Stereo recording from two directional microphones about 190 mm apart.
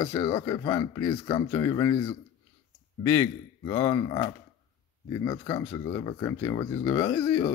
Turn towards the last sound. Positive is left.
turn(degrees=15)  # may be behind; listen again after turning